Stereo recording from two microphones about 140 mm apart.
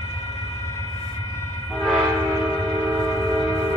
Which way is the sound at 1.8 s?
Centre (ahead or behind).